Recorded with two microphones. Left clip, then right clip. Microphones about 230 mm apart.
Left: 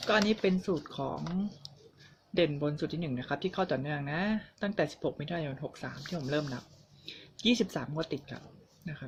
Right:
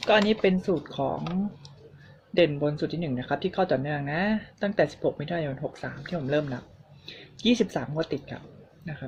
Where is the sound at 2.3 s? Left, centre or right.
Centre.